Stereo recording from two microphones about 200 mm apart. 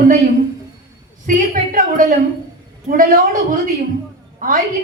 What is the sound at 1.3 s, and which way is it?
A woman's voice, 40° right (ahead or behind).